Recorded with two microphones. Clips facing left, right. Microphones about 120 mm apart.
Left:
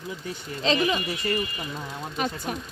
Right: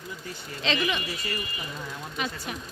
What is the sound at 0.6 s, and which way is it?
Speech, 35° left (ahead or behind).